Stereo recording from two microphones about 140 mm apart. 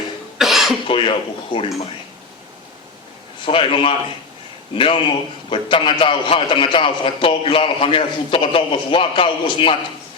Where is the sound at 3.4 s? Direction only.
40° left (ahead or behind).